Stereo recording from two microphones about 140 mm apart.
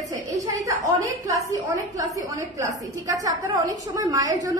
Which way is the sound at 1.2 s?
25° right (ahead or behind).